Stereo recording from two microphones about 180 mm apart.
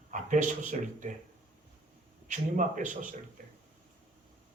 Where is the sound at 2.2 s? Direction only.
45° right (ahead or behind).